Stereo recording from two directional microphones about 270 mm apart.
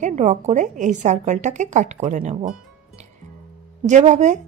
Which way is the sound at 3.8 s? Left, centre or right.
Right.